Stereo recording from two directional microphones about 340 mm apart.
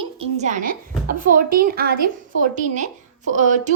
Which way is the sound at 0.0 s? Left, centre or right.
Centre.